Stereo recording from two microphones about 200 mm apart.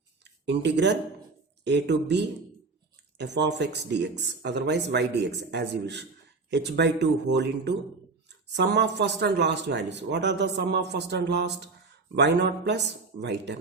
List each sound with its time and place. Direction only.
0.3 s speech: 60° right (ahead or behind)